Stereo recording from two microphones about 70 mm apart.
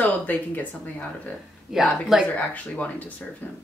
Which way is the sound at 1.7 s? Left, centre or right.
Centre.